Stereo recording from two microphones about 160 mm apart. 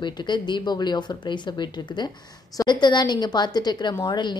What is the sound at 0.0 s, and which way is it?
A woman's voice, 30° left (ahead or behind).